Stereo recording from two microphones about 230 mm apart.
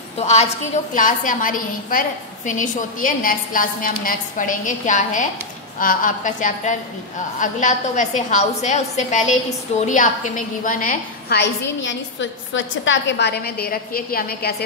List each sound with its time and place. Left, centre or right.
0.2 s a woman's voice: left